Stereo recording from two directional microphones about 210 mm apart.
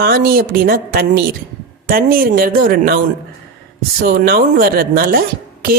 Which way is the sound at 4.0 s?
45° right (ahead or behind).